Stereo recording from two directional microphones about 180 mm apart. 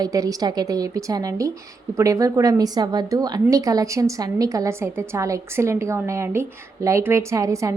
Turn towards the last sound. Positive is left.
turn(degrees=-20)  # may be behind; listen again after turning